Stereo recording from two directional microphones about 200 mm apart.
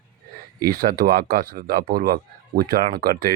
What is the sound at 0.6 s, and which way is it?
Speech, 45° right (ahead or behind).